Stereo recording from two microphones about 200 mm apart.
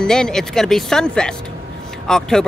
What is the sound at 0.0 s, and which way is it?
Speech, 5° left (ahead or behind).